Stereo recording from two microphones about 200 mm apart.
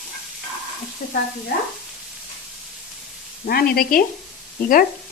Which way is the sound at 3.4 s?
50° left (ahead or behind).